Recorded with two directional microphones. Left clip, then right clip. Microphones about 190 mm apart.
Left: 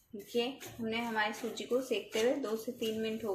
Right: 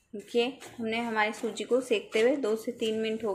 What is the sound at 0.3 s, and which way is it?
Speech, 35° right (ahead or behind).